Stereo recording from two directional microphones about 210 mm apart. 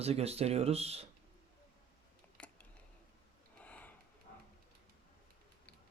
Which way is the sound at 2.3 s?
5° left (ahead or behind).